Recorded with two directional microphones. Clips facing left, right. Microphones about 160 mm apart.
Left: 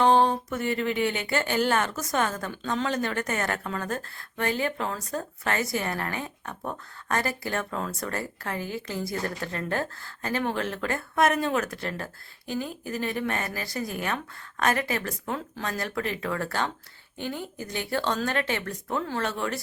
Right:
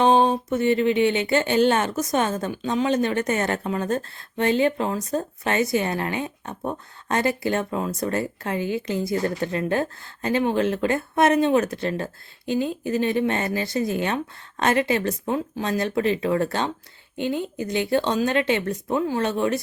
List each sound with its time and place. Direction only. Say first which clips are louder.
0.0 s speech: right 3 dB; 20° right (ahead or behind)